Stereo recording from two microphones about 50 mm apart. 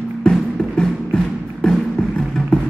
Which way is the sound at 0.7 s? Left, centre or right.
Centre.